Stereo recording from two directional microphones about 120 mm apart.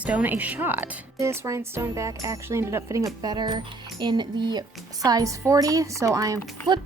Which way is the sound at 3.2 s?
35° right (ahead or behind).